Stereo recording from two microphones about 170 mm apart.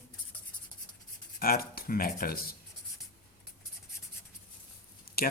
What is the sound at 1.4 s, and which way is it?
Speech, 60° left (ahead or behind).